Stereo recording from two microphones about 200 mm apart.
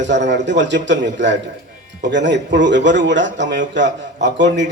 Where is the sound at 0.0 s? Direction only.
60° right (ahead or behind).